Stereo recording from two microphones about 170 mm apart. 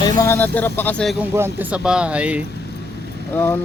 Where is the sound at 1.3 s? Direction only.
10° right (ahead or behind).